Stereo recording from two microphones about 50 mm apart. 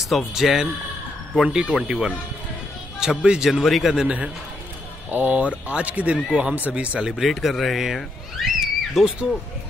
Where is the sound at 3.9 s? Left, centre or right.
Centre.